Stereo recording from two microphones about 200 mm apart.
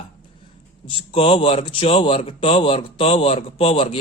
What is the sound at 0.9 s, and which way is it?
A man's voice, 25° left (ahead or behind).